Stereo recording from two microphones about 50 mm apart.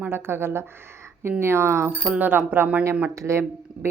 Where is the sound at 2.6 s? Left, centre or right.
Right.